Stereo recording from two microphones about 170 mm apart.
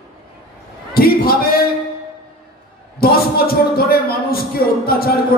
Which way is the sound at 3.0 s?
65° left (ahead or behind).